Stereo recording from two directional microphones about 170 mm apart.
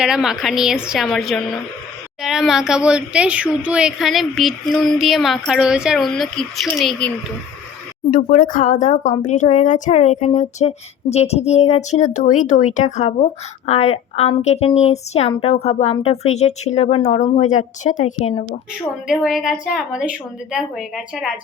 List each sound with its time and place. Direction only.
0.0 s speech: 5° right (ahead or behind)
8.1 s speech: 55° left (ahead or behind); by 18.4 s 40° left (ahead or behind)
19.0 s speech: 5° right (ahead or behind)